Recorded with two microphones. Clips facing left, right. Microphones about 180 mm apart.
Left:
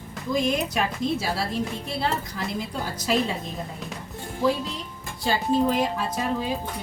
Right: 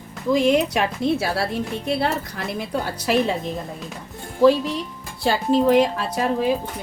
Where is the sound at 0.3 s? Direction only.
75° right (ahead or behind).